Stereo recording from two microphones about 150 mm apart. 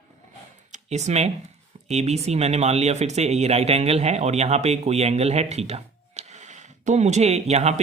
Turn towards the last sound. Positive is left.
turn(degrees=-45)  # may be behind; listen again after turning